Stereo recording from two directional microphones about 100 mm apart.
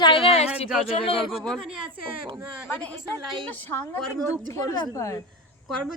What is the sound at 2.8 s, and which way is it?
A woman's voice, 15° left (ahead or behind).